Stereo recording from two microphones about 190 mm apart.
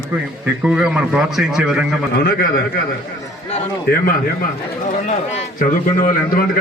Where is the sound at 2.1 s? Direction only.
60° left (ahead or behind).